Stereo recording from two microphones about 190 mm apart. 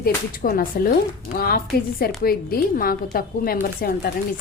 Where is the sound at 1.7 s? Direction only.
50° left (ahead or behind).